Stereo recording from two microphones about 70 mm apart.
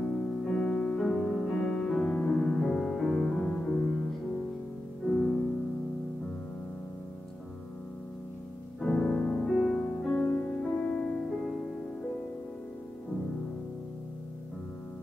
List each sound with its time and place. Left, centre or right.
0.0 s music: centre
5.0 s music: centre
8.8 s music: centre
10.2 s music: left
10.6 s music: centre